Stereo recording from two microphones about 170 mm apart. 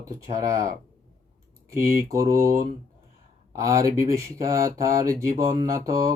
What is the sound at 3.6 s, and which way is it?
Speech, 20° right (ahead or behind).